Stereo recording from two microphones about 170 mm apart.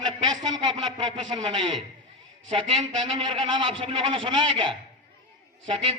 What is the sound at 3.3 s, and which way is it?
A man's voice, 30° right (ahead or behind).